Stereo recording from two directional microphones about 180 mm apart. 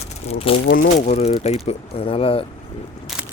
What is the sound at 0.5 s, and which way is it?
Speech, 30° left (ahead or behind).